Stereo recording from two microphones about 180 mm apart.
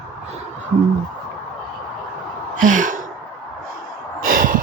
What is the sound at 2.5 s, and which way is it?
Gasp, 45° right (ahead or behind).